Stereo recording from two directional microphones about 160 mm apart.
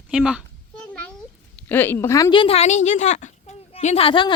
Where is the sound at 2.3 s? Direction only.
35° left (ahead or behind).